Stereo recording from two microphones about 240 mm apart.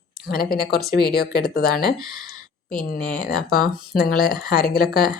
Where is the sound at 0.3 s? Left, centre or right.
Left.